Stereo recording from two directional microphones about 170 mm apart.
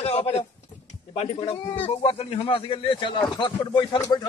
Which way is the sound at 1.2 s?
35° left (ahead or behind).